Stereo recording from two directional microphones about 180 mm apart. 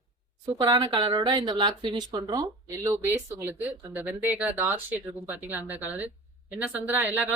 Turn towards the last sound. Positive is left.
turn(degrees=-10)  # may be behind; listen again after turning